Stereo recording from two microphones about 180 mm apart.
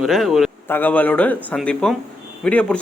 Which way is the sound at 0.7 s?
10° left (ahead or behind).